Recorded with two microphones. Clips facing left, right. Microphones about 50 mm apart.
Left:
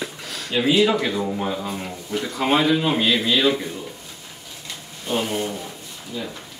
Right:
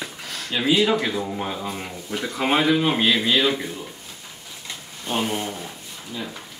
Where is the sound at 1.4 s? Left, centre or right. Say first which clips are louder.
Left 2 dB; centre.